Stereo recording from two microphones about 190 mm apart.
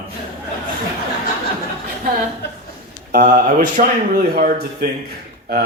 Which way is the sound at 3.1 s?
45° right (ahead or behind).